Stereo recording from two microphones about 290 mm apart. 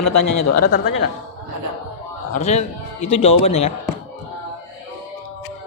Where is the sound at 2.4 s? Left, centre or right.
Left.